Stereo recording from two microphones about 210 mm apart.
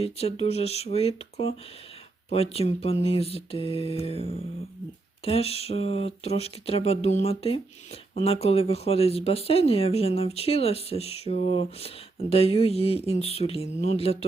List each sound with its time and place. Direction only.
0.0 s speech: 30° left (ahead or behind)